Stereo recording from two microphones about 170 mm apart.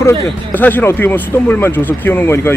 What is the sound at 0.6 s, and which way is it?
Speech, 10° left (ahead or behind).